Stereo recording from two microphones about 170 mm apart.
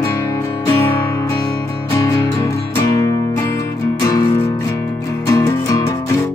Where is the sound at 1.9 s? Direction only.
20° left (ahead or behind).